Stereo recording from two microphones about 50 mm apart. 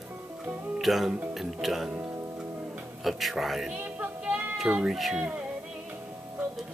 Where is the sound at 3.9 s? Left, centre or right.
Right.